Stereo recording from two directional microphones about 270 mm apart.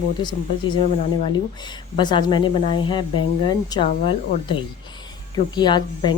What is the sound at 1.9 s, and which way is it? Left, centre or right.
Speech, centre.